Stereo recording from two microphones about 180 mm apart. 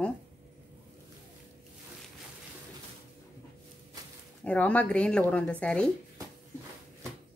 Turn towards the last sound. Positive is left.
turn(degrees=5)  # may be behind; listen again after turning